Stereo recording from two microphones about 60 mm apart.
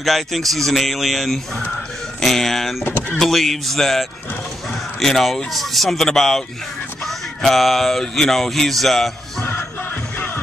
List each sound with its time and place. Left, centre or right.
0.0 s speech: centre
2.8 s speech: left
3.2 s speech: centre
10.1 s music: left